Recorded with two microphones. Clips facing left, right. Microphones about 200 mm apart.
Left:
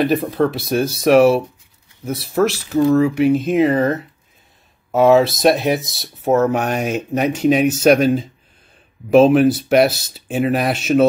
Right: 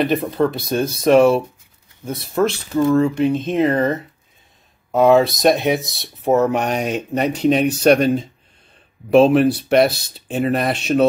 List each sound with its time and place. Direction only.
0.0 s speech: centre (ahead or behind)